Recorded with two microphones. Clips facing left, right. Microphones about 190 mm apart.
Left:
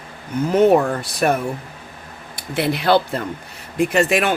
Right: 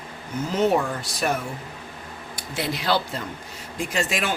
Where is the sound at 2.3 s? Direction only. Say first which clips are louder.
Left 7 dB; 60° left (ahead or behind).